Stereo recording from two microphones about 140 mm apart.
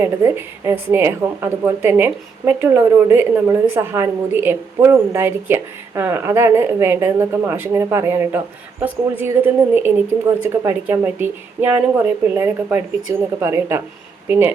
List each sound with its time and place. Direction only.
0.0 s a woman's voice: 15° right (ahead or behind)